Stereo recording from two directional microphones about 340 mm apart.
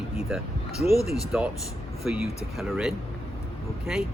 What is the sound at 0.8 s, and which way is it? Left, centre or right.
Speech, centre.